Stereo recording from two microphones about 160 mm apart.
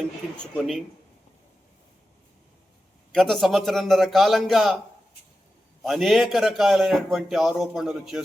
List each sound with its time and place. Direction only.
0.5 s a man's voice: centre (ahead or behind)
3.1 s a man's voice: centre (ahead or behind)
5.8 s a man's voice: centre (ahead or behind)